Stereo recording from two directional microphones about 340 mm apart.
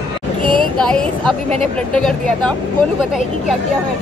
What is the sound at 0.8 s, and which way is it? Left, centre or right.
Speech, centre.